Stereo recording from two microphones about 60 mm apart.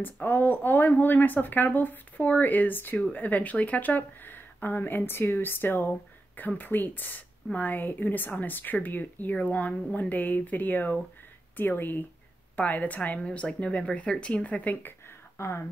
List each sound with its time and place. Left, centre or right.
0.0 s a woman's voice: left
15.3 s speech: left